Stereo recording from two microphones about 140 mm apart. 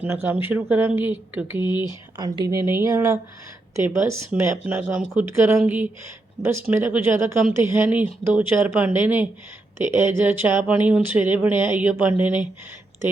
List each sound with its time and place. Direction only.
0.0 s speech: 15° right (ahead or behind)
2.1 s speech: 30° right (ahead or behind); by 12.5 s 10° right (ahead or behind)